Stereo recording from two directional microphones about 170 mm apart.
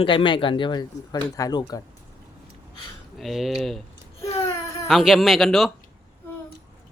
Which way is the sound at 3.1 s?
Centre (ahead or behind).